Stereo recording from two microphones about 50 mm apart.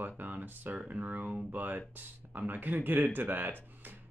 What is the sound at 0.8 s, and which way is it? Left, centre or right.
Speech, right.